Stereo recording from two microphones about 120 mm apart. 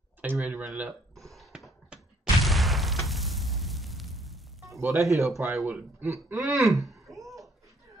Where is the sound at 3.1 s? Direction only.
Centre (ahead or behind).